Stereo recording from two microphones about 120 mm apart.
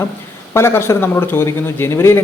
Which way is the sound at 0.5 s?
20° left (ahead or behind).